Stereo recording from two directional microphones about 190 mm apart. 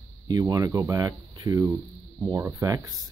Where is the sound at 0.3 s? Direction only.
20° right (ahead or behind).